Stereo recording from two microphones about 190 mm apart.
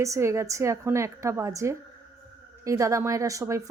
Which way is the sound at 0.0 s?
15° right (ahead or behind).